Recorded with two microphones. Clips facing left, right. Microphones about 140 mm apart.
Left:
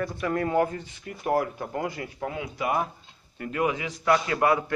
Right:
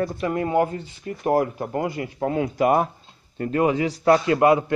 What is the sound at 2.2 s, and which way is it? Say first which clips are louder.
Speech: right 10 dB; 45° right (ahead or behind).